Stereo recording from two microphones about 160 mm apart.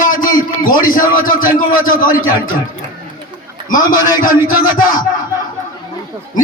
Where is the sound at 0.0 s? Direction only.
55° left (ahead or behind).